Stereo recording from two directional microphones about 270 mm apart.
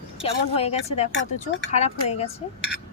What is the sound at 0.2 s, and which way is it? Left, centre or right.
Speech, left.